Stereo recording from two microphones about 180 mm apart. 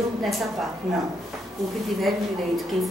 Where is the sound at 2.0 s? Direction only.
Centre (ahead or behind).